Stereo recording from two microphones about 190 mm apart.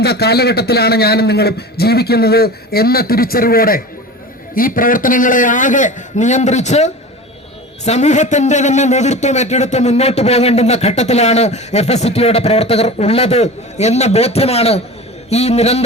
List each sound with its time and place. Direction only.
0.0 s a man's voice: 60° left (ahead or behind); by 15.8 s 35° left (ahead or behind)